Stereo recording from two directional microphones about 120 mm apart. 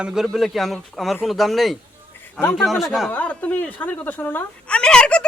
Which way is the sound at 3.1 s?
10° left (ahead or behind).